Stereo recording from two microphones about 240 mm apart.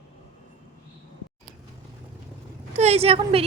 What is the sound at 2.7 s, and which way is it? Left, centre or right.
Speech, right.